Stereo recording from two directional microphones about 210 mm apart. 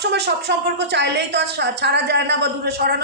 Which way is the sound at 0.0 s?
50° right (ahead or behind).